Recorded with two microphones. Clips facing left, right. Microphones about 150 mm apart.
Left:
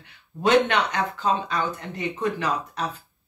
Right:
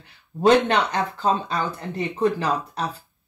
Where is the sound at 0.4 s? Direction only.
35° right (ahead or behind).